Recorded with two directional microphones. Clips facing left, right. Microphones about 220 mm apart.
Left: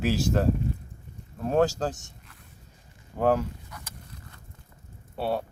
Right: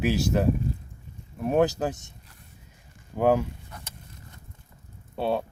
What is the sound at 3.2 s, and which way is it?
Speech, 15° right (ahead or behind).